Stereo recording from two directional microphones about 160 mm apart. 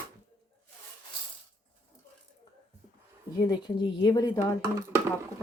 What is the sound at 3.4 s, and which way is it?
A woman's voice, 30° left (ahead or behind).